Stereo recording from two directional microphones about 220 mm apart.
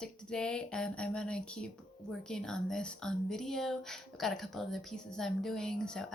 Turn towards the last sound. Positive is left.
turn(degrees=5)  # may be behind; listen again after turning